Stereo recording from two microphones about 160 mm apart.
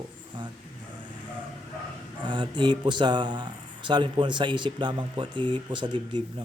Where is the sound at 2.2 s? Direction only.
30° right (ahead or behind).